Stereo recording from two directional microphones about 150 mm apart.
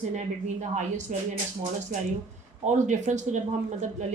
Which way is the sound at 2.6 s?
50° right (ahead or behind).